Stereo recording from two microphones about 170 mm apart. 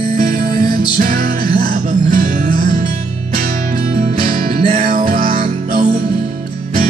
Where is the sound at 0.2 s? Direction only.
55° right (ahead or behind).